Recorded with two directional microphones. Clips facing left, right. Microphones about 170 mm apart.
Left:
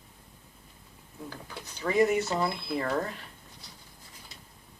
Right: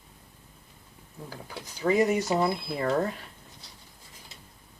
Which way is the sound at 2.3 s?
10° right (ahead or behind).